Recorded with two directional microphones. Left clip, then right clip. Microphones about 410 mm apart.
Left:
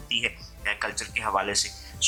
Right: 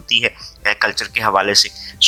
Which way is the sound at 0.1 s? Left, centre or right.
Centre.